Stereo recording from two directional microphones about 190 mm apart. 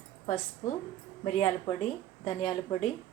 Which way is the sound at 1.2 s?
35° left (ahead or behind).